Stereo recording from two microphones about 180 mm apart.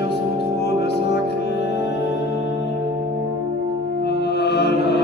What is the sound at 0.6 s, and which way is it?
Music, 65° left (ahead or behind).